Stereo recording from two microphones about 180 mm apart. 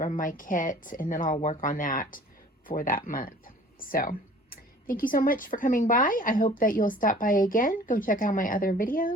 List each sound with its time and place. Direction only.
0.0 s speech: 50° left (ahead or behind)